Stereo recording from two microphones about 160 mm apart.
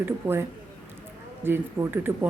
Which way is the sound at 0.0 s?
15° right (ahead or behind).